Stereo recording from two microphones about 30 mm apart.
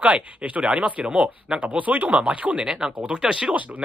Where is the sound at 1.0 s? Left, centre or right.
Right.